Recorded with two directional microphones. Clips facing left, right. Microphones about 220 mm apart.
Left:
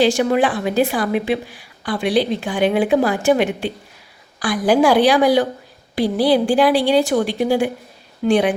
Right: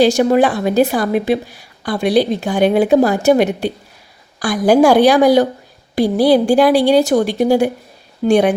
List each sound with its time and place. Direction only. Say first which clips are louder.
0.0 s a woman's voice: right 4 dB; 40° right (ahead or behind)